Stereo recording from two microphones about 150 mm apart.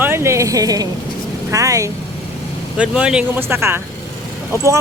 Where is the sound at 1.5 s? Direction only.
20° right (ahead or behind).